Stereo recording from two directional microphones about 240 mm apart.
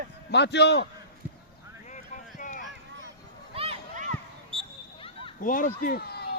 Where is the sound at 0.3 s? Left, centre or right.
Left.